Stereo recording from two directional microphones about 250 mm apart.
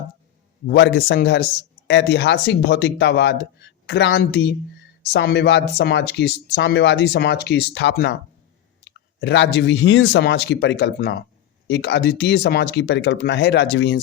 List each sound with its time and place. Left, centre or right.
0.7 s speech: left